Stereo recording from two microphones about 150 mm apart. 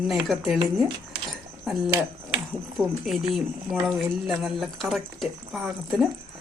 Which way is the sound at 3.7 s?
5° right (ahead or behind).